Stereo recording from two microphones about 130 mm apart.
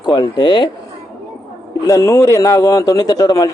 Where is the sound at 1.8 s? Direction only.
25° left (ahead or behind).